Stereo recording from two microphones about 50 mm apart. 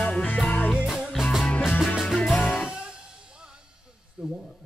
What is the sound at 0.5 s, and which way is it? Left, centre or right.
Music, left.